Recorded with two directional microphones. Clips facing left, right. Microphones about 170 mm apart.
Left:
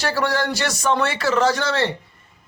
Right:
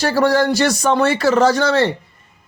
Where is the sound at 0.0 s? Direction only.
40° right (ahead or behind).